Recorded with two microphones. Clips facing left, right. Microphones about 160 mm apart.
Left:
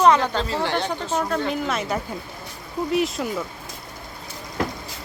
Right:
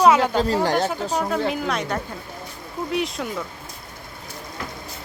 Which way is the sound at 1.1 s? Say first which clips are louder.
Left 3 dB; 5° right (ahead or behind).